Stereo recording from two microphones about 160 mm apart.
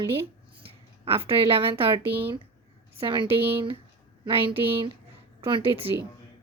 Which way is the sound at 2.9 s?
30° right (ahead or behind).